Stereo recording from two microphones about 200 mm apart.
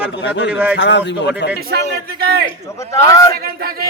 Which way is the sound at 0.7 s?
65° left (ahead or behind).